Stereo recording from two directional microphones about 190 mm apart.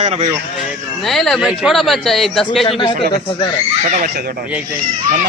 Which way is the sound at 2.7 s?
25° left (ahead or behind).